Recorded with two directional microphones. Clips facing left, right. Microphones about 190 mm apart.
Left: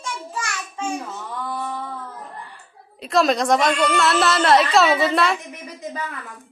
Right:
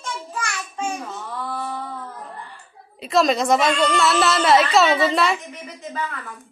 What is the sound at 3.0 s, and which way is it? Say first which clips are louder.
A woman's voice: even; centre (ahead or behind).